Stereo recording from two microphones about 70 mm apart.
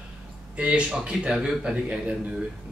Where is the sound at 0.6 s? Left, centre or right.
Centre.